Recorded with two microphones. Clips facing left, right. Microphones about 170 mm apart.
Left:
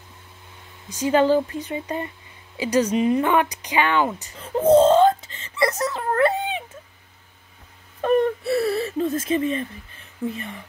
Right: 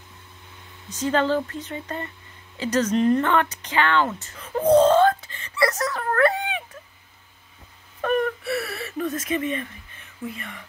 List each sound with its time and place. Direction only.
0.8 s speech: 10° left (ahead or behind)
4.6 s speech: 25° left (ahead or behind)
8.0 s whimper: 25° left (ahead or behind)